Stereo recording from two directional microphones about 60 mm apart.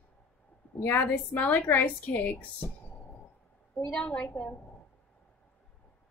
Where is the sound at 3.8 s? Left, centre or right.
Centre.